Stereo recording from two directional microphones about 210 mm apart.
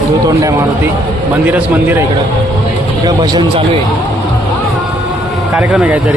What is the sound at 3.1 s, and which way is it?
Speech, 20° right (ahead or behind).